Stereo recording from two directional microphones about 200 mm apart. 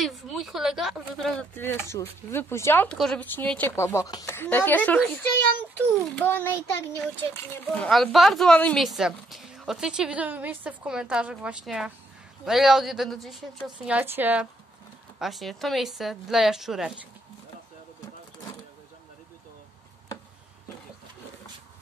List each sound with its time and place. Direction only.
0.0 s speech: centre (ahead or behind)